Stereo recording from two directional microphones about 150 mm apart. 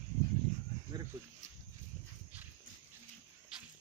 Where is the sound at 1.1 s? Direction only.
15° right (ahead or behind).